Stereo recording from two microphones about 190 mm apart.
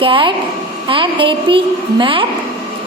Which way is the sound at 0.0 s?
25° right (ahead or behind).